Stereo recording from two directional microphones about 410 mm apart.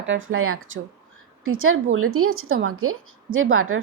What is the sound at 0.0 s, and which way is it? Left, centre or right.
A woman's voice, right.